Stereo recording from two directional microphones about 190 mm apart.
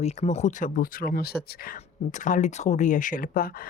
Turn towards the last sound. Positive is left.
turn(degrees=50)  # may be behind; listen again after turning